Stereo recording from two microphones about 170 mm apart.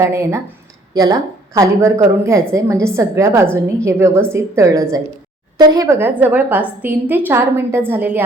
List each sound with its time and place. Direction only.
0.0 s a woman's voice: 15° right (ahead or behind)